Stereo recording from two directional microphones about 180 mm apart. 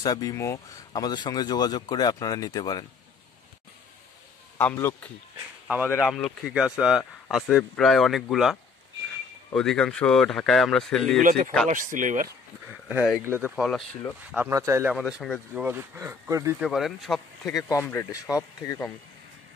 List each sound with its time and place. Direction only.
0.0 s speech: 20° left (ahead or behind)
4.6 s speech: 10° left (ahead or behind)
5.9 s a man's voice: centre (ahead or behind)
11.2 s speech: 45° right (ahead or behind)
12.8 s speech: centre (ahead or behind)
13.2 s speech: 15° right (ahead or behind)
13.6 s a man's voice: centre (ahead or behind)
14.3 s a man's voice: 10° right (ahead or behind)
16.5 s a man's voice: centre (ahead or behind)
17.6 s speech: 15° left (ahead or behind)